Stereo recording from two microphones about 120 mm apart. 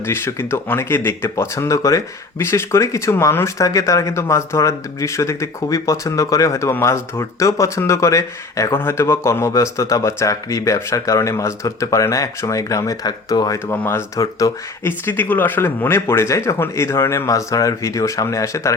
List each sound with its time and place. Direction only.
0.0 s speech: 20° left (ahead or behind)
13.7 s speech: 20° left (ahead or behind)
15.0 s speech: 15° left (ahead or behind)